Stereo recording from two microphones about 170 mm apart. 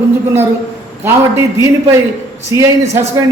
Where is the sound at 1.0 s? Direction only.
15° right (ahead or behind).